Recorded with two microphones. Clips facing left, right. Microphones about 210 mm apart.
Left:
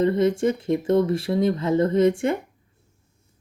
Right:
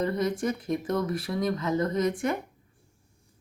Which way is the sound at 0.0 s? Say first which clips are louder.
Left 7 dB; 25° left (ahead or behind).